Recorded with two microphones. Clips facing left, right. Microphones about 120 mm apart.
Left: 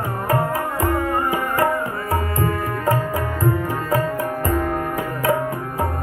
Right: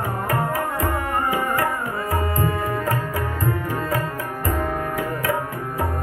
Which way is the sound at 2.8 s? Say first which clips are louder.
Left 4 dB; 15° left (ahead or behind).